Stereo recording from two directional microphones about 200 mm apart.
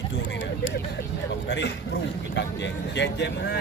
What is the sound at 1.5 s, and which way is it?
Speech, 60° left (ahead or behind).